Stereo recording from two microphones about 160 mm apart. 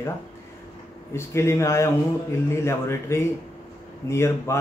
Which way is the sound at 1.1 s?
15° left (ahead or behind).